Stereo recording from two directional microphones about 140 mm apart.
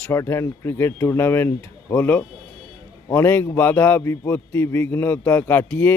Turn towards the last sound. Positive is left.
turn(degrees=15)  # may be behind; listen again after turning